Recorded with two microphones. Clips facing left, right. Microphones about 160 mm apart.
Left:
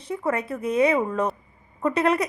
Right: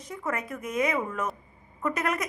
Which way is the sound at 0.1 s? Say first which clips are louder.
Left 7 dB; 30° left (ahead or behind).